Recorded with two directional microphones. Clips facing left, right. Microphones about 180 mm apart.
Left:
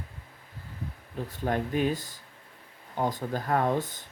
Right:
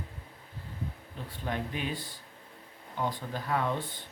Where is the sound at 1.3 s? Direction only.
45° left (ahead or behind).